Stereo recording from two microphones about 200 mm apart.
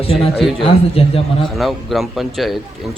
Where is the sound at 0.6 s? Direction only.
30° left (ahead or behind).